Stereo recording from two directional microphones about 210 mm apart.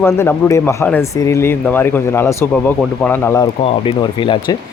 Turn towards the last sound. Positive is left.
turn(degrees=25)  # may be behind; listen again after turning